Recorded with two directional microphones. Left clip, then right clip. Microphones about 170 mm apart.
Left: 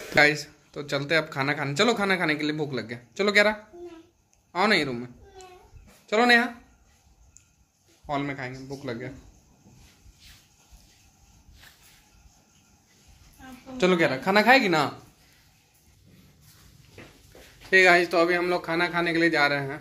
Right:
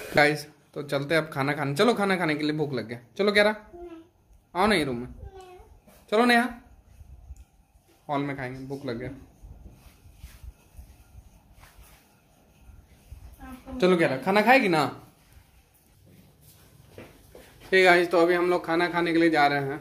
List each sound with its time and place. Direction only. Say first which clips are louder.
0.1 s speech: left 1 dB; 10° right (ahead or behind)
8.1 s speech: even; 5° right (ahead or behind)
13.7 s a man's voice: even; 5° left (ahead or behind)
17.6 s speech: left 1 dB; 5° right (ahead or behind)